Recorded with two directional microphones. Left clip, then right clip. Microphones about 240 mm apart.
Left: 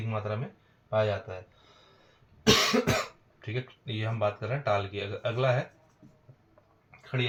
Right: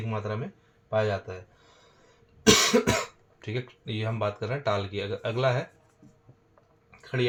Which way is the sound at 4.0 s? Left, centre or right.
Right.